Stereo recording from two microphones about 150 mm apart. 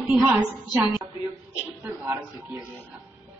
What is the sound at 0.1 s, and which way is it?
A woman's voice, 15° right (ahead or behind).